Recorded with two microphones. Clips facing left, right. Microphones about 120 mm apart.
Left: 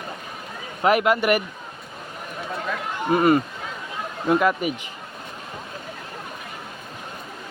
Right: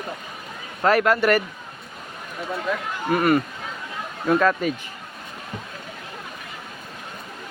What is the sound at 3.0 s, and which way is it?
Speech, 25° left (ahead or behind).